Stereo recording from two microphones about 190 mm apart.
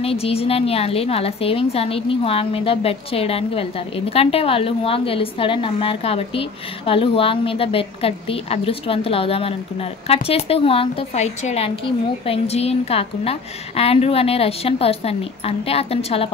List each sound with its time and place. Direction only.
0.0 s a woman's voice: 30° left (ahead or behind)